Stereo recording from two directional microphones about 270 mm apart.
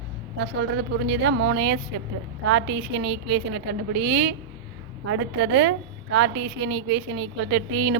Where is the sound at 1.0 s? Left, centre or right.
Right.